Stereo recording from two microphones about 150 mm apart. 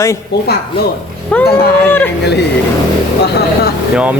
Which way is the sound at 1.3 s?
10° left (ahead or behind).